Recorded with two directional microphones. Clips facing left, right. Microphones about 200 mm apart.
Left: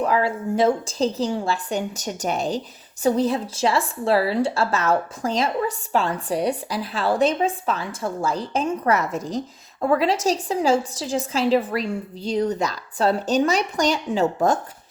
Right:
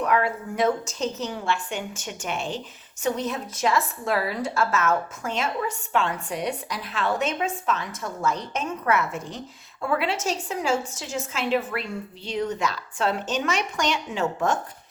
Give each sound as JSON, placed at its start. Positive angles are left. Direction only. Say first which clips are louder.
{"t": 0.0, "sound": "speech", "louder": "left 2 dB", "side_deg": 30}